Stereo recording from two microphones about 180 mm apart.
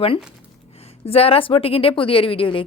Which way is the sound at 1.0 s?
35° left (ahead or behind).